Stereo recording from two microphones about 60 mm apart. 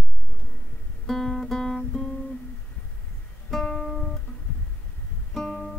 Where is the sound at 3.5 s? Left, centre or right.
Centre.